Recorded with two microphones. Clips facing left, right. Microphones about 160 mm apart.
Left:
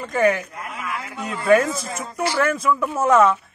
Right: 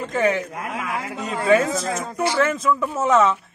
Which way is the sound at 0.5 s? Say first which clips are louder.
Right 3 dB; 90° right.